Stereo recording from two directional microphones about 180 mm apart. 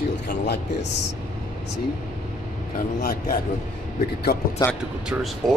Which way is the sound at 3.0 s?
55° left (ahead or behind).